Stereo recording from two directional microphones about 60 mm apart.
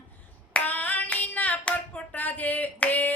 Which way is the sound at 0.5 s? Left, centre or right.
Left.